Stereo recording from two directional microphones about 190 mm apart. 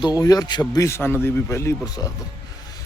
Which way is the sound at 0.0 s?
20° left (ahead or behind).